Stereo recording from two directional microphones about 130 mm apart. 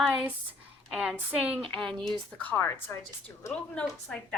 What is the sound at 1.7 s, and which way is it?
A woman's voice, 5° left (ahead or behind).